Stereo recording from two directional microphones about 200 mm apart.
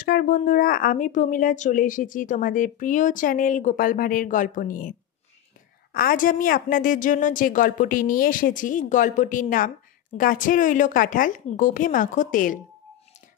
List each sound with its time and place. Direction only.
0.0 s speech: 45° left (ahead or behind)
5.9 s a woman's voice: 45° left (ahead or behind)